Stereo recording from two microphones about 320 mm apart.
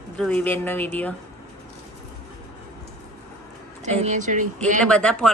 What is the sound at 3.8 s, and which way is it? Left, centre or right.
Speech, right.